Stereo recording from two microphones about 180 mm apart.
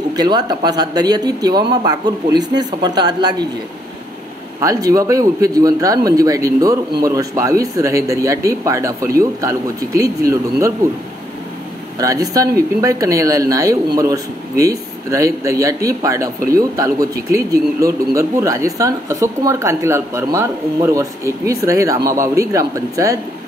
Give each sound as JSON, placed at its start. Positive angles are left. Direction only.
{"t": 0.1, "sound": "speech", "side_deg": -20}
{"t": 4.6, "sound": "speech", "side_deg": -20}
{"t": 12.0, "sound": "speech", "side_deg": -20}